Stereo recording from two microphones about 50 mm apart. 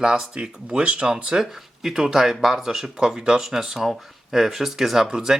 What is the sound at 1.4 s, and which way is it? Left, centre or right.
Speech, centre.